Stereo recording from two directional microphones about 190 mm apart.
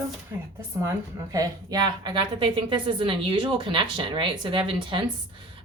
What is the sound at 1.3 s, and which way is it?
A woman's voice, 20° right (ahead or behind).